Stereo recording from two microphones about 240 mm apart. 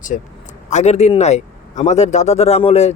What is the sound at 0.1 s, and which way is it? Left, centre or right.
Speech, left.